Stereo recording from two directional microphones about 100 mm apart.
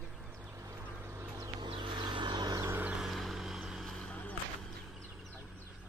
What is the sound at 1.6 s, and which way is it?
Vehicle, 55° right (ahead or behind).